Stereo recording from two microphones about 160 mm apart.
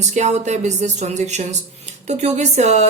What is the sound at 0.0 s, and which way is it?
Speech, 45° right (ahead or behind).